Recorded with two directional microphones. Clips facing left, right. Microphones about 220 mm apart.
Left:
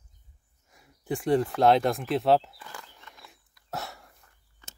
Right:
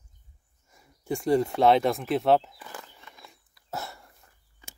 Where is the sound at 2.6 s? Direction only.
20° right (ahead or behind).